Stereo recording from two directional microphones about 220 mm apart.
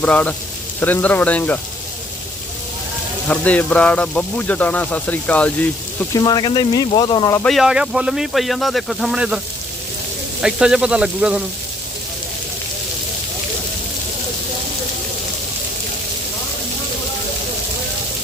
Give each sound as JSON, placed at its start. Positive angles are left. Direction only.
{"t": 0.0, "sound": "speech", "side_deg": 5}
{"t": 3.2, "sound": "speech", "side_deg": 5}
{"t": 6.0, "sound": "speech", "side_deg": 15}
{"t": 7.4, "sound": "speech", "side_deg": 0}
{"t": 10.4, "sound": "speech", "side_deg": -5}